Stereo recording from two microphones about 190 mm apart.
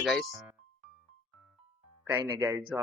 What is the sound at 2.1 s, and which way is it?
Speech, 15° right (ahead or behind).